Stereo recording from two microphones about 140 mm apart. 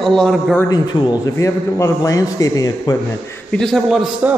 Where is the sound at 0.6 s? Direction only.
30° left (ahead or behind).